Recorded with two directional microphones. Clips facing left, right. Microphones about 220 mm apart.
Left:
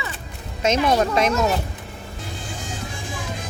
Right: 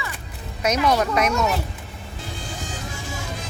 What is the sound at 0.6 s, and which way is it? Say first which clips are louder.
Speech: left 1 dB; 25° left (ahead or behind).